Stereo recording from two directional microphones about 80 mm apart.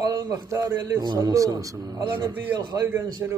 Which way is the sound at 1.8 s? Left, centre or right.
Right.